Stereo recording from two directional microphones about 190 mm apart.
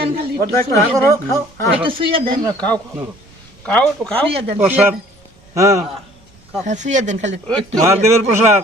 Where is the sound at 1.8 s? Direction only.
25° right (ahead or behind).